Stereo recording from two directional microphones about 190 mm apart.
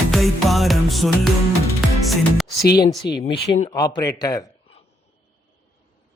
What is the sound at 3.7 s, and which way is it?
Speech, 20° left (ahead or behind).